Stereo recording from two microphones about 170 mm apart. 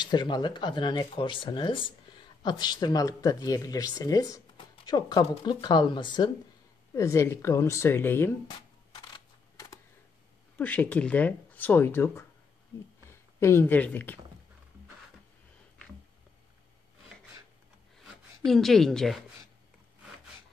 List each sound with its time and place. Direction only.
0.0 s speech: 25° left (ahead or behind)
7.0 s speech: 15° left (ahead or behind)
9.1 s typing: 20° left (ahead or behind)
10.6 s speech: 10° left (ahead or behind)
17.9 s zipper: centre (ahead or behind)